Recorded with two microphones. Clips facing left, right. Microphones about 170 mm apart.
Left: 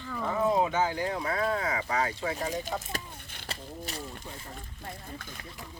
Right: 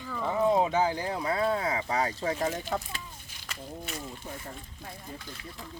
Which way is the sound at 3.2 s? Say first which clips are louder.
Left 4 dB; 60° left (ahead or behind).